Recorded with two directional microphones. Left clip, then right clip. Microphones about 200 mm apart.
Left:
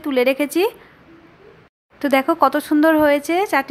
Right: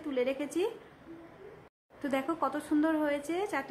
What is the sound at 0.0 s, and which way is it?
Speech, 35° left (ahead or behind).